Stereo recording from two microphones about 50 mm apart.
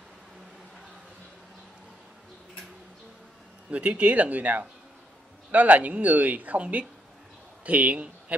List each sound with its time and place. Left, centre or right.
3.7 s a woman's voice: right